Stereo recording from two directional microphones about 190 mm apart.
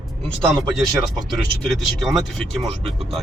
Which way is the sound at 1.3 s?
Centre (ahead or behind).